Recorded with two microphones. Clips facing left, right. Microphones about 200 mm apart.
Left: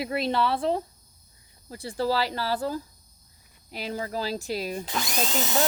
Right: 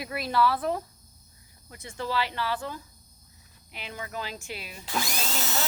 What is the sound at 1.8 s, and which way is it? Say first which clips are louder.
Speech: left 5 dB; 35° left (ahead or behind).